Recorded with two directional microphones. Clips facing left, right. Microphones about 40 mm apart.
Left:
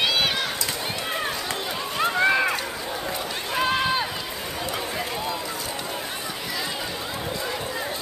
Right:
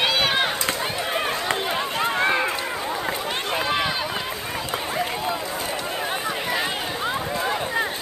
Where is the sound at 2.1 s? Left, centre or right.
Right.